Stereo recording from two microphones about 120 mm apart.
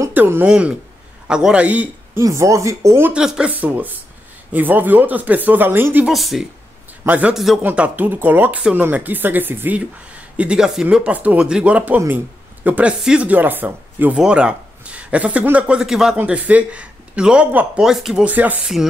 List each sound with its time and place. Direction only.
0.1 s a man's voice: 15° right (ahead or behind)
2.2 s speech: 25° right (ahead or behind)
3.1 s speech: 5° right (ahead or behind)
6.0 s speech: centre (ahead or behind)
7.1 s speech: 15° right (ahead or behind)
7.3 s speech: centre (ahead or behind)
7.6 s speech: 15° right (ahead or behind)